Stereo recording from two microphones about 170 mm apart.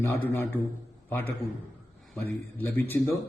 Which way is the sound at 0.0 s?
15° left (ahead or behind).